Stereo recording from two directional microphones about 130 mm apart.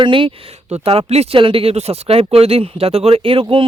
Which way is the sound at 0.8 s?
50° right (ahead or behind).